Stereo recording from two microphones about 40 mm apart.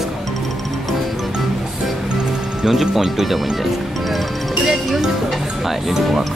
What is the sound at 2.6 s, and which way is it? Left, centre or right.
Speech, centre.